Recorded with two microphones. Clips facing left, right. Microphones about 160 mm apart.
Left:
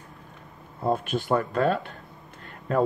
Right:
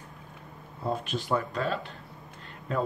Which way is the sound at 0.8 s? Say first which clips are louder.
Left 5 dB; 55° left (ahead or behind).